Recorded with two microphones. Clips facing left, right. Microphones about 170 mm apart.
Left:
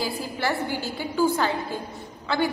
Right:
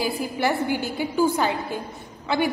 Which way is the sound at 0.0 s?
20° right (ahead or behind).